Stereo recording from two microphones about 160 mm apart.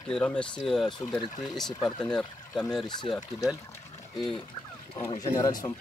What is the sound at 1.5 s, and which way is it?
Speech, centre (ahead or behind).